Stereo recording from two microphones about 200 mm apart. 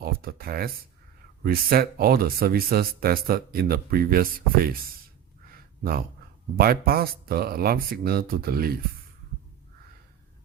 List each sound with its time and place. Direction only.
0.0 s a sound: 50° right (ahead or behind)
1.5 s speech: 50° right (ahead or behind)
6.6 s speech: 50° right (ahead or behind)